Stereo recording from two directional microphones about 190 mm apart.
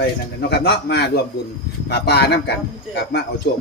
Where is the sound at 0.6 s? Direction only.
60° left (ahead or behind).